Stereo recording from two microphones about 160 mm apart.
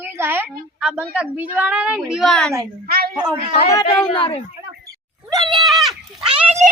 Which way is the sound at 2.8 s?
70° right (ahead or behind).